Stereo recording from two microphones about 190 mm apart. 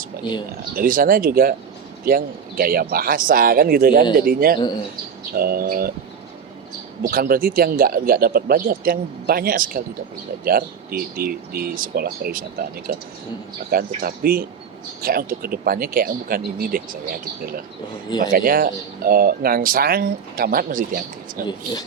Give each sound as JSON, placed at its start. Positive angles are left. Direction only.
{"t": 0.8, "sound": "speech", "side_deg": -50}
{"t": 7.0, "sound": "speech", "side_deg": -50}
{"t": 18.2, "sound": "speech", "side_deg": -50}
{"t": 21.4, "sound": "speech", "side_deg": 20}